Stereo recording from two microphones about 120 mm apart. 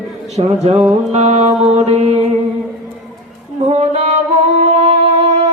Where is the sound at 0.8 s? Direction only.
5° right (ahead or behind).